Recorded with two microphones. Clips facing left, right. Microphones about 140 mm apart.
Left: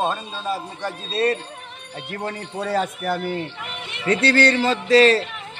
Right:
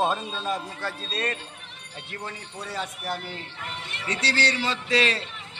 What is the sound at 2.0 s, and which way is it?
Speech, 50° left (ahead or behind).